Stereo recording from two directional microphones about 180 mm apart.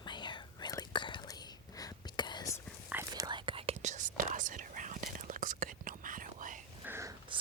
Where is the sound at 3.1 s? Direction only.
25° right (ahead or behind); by 6.6 s 45° right (ahead or behind).